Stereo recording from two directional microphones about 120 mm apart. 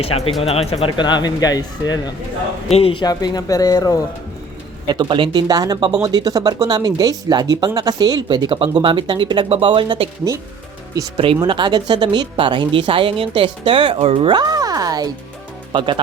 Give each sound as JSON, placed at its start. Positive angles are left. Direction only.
{"t": 0.4, "sound": "speech", "side_deg": 55}
{"t": 0.9, "sound": "a man's voice", "side_deg": 40}
{"t": 2.6, "sound": "speech", "side_deg": 55}
{"t": 3.0, "sound": "a man's voice", "side_deg": 35}
{"t": 4.9, "sound": "speech", "side_deg": -40}
{"t": 11.3, "sound": "speech", "side_deg": -40}
{"t": 15.7, "sound": "speech", "side_deg": -40}